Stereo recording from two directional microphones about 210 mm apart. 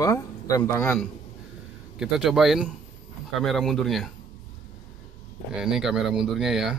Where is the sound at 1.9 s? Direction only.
Centre (ahead or behind).